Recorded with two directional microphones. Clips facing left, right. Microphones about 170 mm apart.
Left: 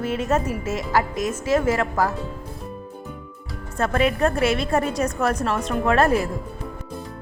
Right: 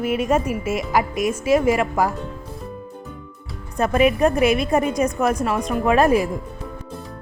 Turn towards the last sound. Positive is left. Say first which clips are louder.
# right 2 dB
turn(degrees=-15)  # may be behind; listen again after turning